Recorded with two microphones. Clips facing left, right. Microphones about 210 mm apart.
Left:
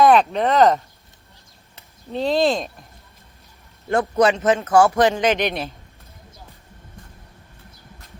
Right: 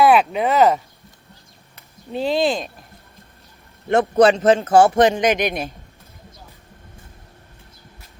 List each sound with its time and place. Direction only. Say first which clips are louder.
0.0 s speech: even; 5° right (ahead or behind)
2.1 s speech: left 1 dB; centre (ahead or behind)
3.8 s a man's voice: right 4 dB; 25° right (ahead or behind)